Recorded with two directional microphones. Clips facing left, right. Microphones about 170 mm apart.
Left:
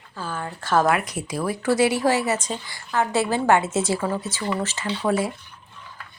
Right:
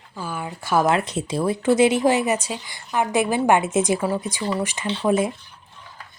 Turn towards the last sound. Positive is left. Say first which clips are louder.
# right 2 dB
turn(degrees=-20)  # may be behind; listen again after turning